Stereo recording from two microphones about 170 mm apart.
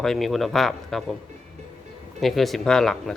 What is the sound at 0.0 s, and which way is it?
Speech, centre (ahead or behind).